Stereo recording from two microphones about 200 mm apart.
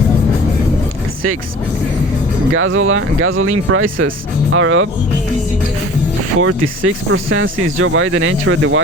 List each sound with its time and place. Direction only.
2.5 s speech: 90° right
6.4 s speech: 90° right